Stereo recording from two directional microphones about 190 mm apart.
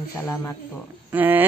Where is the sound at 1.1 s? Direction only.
10° right (ahead or behind).